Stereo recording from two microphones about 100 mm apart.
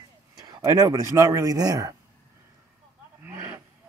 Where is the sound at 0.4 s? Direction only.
40° right (ahead or behind).